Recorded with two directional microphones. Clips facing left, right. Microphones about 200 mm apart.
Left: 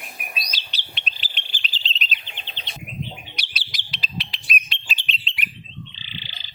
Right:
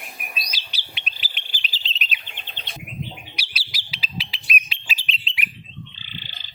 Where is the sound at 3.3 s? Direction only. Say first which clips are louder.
Even; 5° right (ahead or behind).